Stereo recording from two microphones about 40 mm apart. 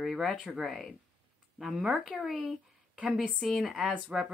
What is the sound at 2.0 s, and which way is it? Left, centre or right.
Speech, centre.